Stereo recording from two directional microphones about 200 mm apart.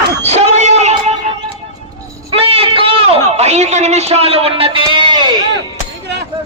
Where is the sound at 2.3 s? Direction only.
30° right (ahead or behind).